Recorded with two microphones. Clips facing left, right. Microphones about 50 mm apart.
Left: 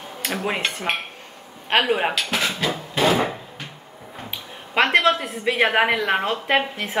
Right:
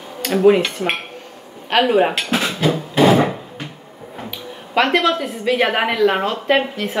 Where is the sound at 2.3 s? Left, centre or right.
Centre.